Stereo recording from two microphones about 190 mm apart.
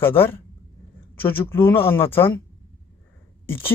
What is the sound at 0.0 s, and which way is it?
Speech, 10° left (ahead or behind).